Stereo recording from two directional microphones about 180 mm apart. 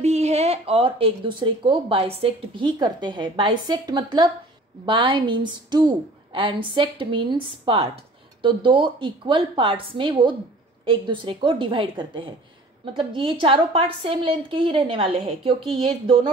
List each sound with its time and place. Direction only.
0.0 s speech: 35° right (ahead or behind)